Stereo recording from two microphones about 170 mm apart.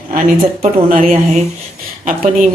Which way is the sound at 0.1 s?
45° right (ahead or behind).